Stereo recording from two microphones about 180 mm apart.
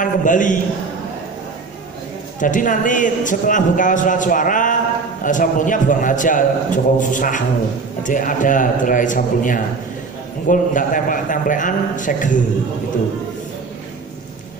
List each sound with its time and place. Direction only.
0.0 s a man's voice: 45° left (ahead or behind)
2.4 s a man's voice: 45° left (ahead or behind)